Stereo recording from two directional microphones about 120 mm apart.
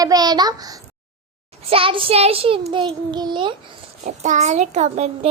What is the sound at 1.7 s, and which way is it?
A child's voice, 50° right (ahead or behind).